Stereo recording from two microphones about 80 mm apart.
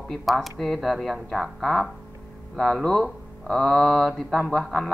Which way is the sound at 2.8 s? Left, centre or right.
Centre.